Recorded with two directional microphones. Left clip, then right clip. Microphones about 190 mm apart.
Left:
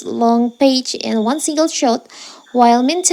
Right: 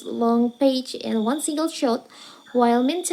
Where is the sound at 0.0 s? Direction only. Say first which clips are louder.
Left 7 dB; 40° left (ahead or behind).